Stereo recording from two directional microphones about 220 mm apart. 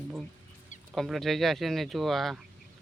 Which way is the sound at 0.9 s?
Centre (ahead or behind).